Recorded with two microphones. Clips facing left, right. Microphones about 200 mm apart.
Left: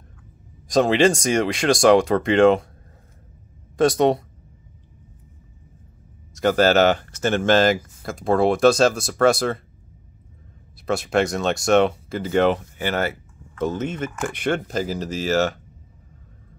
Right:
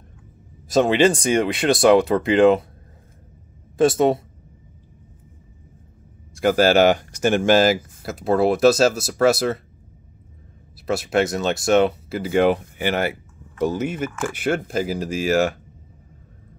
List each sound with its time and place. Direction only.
0.7 s speech: 5° right (ahead or behind)
3.8 s speech: 5° right (ahead or behind)
6.3 s speech: 10° right (ahead or behind)
10.9 s speech: 5° right (ahead or behind)